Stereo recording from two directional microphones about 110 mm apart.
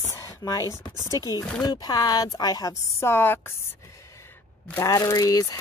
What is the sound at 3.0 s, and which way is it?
Speech, 20° left (ahead or behind).